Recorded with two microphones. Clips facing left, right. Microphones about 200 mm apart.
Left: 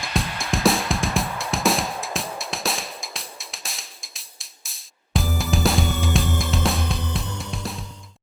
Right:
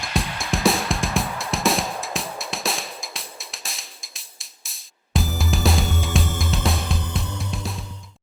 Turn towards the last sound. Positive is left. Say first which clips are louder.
# even
turn(degrees=0)  # may be behind; listen again after turning